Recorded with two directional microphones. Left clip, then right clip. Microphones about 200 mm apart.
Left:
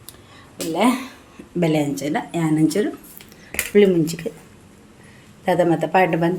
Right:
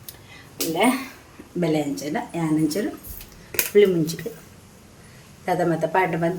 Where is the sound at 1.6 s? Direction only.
35° left (ahead or behind).